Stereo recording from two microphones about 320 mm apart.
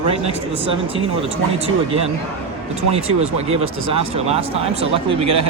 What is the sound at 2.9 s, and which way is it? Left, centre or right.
Speech, centre.